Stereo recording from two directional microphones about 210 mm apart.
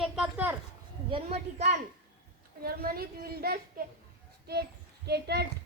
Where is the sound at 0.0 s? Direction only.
5° right (ahead or behind).